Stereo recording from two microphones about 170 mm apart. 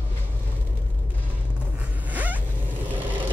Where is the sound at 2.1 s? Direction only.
10° right (ahead or behind).